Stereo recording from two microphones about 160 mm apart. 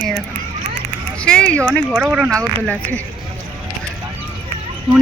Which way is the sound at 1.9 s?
5° right (ahead or behind).